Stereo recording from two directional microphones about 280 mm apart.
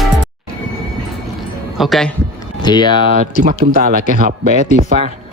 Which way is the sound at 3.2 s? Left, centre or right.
Right.